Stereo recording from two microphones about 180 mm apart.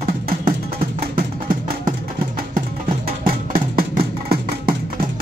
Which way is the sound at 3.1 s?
55° right (ahead or behind).